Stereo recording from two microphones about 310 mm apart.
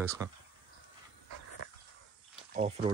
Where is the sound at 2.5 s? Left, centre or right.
Centre.